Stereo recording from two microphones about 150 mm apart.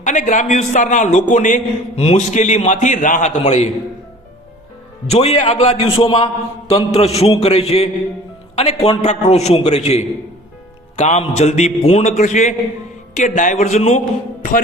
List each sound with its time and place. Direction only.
0.0 s a man's voice: 55° left (ahead or behind)
5.0 s a man's voice: 45° left (ahead or behind)